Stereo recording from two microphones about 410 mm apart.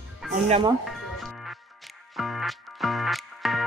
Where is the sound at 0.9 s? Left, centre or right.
Centre.